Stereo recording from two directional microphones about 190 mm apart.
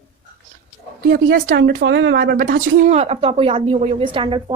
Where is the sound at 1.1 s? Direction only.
50° right (ahead or behind).